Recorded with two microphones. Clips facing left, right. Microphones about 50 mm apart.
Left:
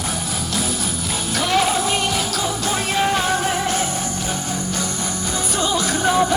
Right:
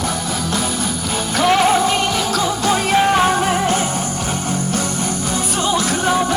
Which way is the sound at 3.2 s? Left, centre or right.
Right.